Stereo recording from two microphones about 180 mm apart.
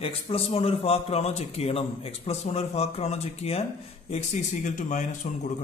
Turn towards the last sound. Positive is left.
turn(degrees=40)  # may be behind; listen again after turning